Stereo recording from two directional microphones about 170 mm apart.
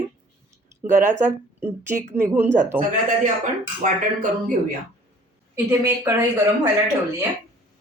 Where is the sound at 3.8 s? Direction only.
50° right (ahead or behind).